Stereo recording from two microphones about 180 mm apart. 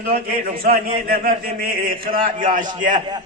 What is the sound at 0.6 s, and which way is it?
A man's voice, 55° right (ahead or behind).